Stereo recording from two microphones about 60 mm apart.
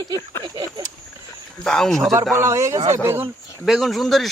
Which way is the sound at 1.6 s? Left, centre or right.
Centre.